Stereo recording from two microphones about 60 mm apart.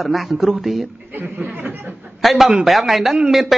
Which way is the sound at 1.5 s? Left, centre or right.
Right.